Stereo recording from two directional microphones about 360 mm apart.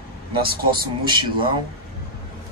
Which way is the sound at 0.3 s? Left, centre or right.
Centre.